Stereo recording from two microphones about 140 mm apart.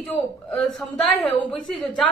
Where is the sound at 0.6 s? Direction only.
Centre (ahead or behind).